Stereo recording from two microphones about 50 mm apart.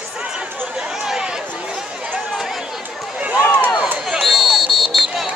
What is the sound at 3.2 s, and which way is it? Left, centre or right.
Run, centre.